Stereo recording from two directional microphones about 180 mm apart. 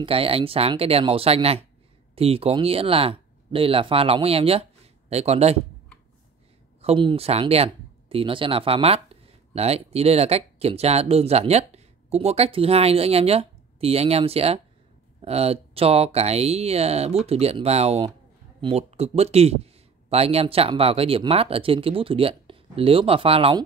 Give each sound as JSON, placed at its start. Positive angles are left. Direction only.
{"t": 0.0, "sound": "a man's voice", "side_deg": -30}
{"t": 6.8, "sound": "a man's voice", "side_deg": -30}